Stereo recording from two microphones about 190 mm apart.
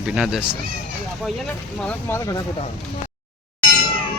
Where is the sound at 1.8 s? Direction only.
15° left (ahead or behind).